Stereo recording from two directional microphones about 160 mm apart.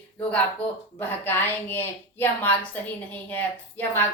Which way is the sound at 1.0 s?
15° left (ahead or behind).